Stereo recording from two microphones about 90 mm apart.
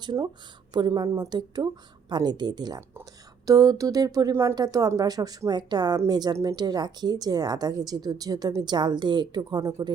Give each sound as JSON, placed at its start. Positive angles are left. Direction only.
{"t": 0.0, "sound": "a woman's voice", "side_deg": -55}
{"t": 3.4, "sound": "a sound", "side_deg": -40}
{"t": 4.5, "sound": "a woman's voice", "side_deg": -45}